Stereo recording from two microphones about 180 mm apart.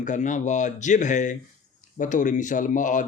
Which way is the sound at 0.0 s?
45° left (ahead or behind).